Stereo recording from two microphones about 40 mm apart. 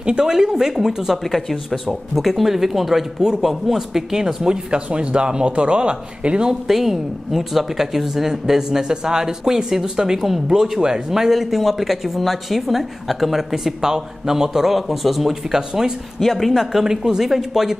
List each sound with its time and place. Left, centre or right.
0.0 s speech: right
1.2 s speech: centre; by 6.5 s right
6.7 s speech: centre
16.2 s speech: centre
16.8 s speech: centre